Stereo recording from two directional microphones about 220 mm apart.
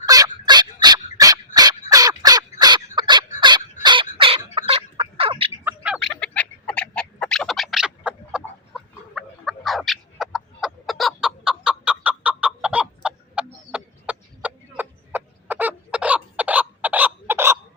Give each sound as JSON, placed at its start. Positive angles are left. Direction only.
{"t": 0.0, "sound": "dog", "side_deg": -15}
{"t": 1.9, "sound": "crow", "side_deg": -15}
{"t": 3.8, "sound": "bird", "side_deg": -20}
{"t": 4.5, "sound": "fowl", "side_deg": -25}
{"t": 5.6, "sound": "a sound", "side_deg": -5}